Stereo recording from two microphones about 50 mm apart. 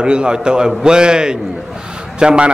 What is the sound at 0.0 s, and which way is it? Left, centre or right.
A man's voice, centre.